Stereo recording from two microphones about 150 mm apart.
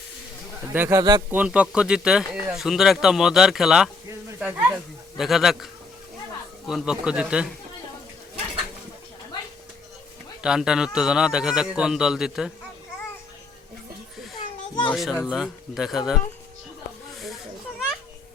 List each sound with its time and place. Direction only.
0.7 s speech: 15° right (ahead or behind)
6.7 s speech: 5° right (ahead or behind)
10.4 s speech: 5° right (ahead or behind)
14.3 s children playing: 30° left (ahead or behind)
14.9 s speech: centre (ahead or behind)